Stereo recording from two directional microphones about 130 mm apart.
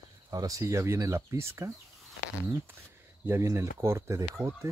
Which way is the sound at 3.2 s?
20° right (ahead or behind).